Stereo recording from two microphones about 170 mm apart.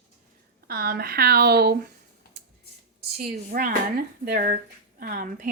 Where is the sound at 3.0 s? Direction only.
60° right (ahead or behind).